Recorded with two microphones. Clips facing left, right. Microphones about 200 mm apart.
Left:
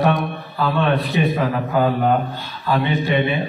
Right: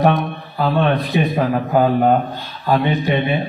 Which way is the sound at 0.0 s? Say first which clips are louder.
Right 2 dB; 45° right (ahead or behind).